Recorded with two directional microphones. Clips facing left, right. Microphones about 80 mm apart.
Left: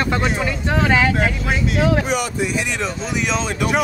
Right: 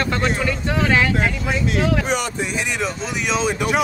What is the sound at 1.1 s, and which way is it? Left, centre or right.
Speech, centre.